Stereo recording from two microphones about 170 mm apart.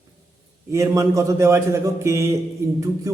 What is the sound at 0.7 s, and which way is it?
A man's voice, 15° right (ahead or behind).